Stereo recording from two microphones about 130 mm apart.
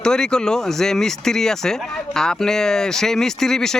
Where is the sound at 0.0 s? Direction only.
5° left (ahead or behind).